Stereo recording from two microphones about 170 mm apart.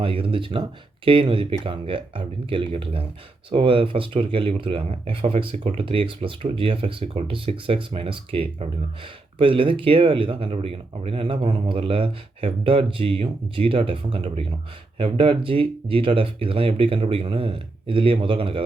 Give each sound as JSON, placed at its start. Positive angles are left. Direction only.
{"t": 0.0, "sound": "speech", "side_deg": -30}